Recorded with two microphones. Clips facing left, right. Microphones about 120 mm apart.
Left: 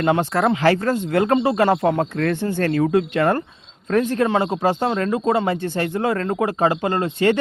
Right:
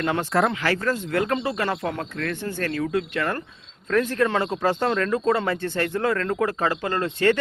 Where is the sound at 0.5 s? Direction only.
30° left (ahead or behind).